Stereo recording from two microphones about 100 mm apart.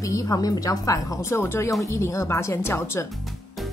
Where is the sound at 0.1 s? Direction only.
35° left (ahead or behind).